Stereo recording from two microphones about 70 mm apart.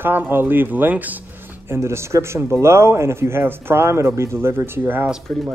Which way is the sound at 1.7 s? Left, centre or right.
Right.